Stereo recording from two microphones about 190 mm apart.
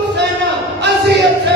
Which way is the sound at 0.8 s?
65° right (ahead or behind).